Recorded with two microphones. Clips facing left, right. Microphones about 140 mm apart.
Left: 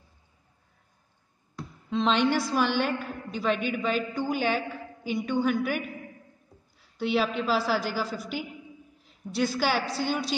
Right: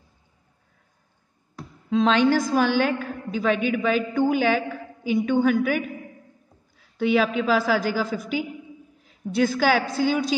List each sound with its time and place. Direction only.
2.0 s a woman's voice: 45° right (ahead or behind)
7.0 s a woman's voice: 50° right (ahead or behind)